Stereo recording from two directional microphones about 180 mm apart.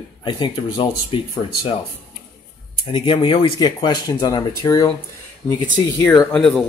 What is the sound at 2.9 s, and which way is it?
Speech, 30° left (ahead or behind).